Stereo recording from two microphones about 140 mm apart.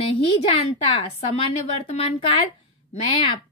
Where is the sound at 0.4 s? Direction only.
45° left (ahead or behind).